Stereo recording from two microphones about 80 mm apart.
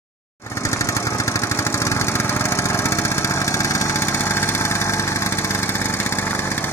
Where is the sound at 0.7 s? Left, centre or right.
Left.